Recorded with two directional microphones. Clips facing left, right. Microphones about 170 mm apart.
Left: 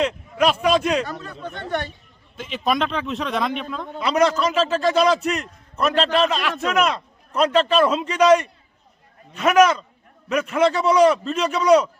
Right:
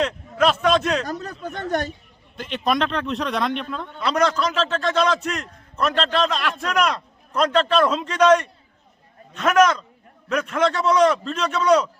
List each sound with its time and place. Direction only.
0.0 s a man's voice: 10° left (ahead or behind)
1.0 s speech: 40° right (ahead or behind)
2.3 s a man's voice: centre (ahead or behind)